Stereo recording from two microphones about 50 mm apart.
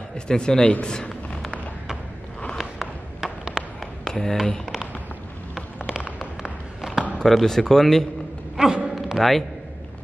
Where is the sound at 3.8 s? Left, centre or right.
Centre.